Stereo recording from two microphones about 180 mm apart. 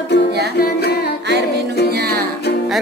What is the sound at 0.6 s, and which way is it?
Music, 60° left (ahead or behind).